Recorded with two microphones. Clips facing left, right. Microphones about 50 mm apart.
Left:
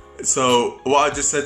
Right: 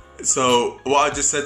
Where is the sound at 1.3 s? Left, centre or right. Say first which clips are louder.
Left 3 dB; centre.